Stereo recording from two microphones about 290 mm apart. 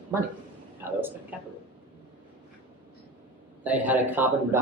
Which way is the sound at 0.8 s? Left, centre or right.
Centre.